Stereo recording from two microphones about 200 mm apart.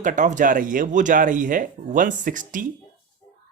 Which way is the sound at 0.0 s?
40° right (ahead or behind).